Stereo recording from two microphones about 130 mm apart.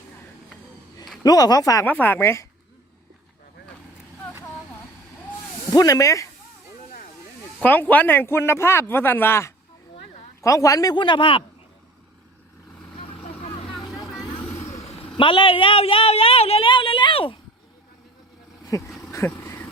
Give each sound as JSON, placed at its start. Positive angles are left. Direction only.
{"t": 1.2, "sound": "speech", "side_deg": 30}
{"t": 1.9, "sound": "a man's voice", "side_deg": 15}
{"t": 5.7, "sound": "speech", "side_deg": 25}
{"t": 7.6, "sound": "a man's voice", "side_deg": 15}
{"t": 14.7, "sound": "vehicle", "side_deg": 55}
{"t": 15.2, "sound": "a woman's voice", "side_deg": 40}
{"t": 18.8, "sound": "vehicle", "side_deg": 0}
{"t": 19.4, "sound": "vehicle", "side_deg": 20}